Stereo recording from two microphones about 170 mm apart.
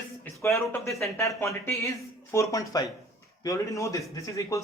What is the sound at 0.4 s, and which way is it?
A man's voice, 15° left (ahead or behind).